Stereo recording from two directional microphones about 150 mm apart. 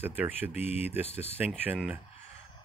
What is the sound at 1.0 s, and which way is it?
Speech, 45° left (ahead or behind).